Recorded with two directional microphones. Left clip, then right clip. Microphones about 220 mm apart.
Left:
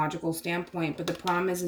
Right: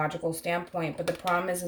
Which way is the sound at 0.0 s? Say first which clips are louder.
Even; 35° right (ahead or behind).